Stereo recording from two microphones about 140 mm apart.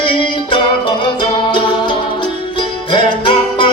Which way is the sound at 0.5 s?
35° left (ahead or behind).